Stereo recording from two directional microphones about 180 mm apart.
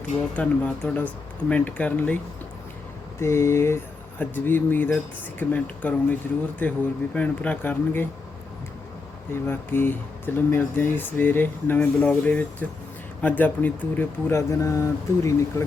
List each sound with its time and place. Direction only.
0.3 s speech: 10° left (ahead or behind)
3.2 s speech: 15° left (ahead or behind)
9.3 s speech: 10° left (ahead or behind)